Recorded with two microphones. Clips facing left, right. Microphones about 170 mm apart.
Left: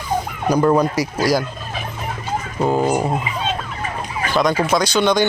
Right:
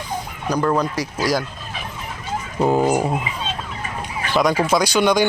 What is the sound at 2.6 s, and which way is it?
Speech, 5° right (ahead or behind).